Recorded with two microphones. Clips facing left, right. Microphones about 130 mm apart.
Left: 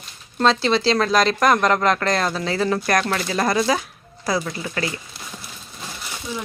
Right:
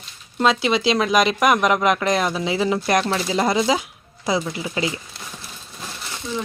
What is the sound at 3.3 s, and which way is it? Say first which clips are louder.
Speech: right 1 dB; 15° right (ahead or behind).